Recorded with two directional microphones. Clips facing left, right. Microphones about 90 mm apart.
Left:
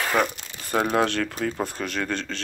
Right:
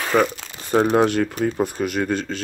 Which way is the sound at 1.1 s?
15° right (ahead or behind).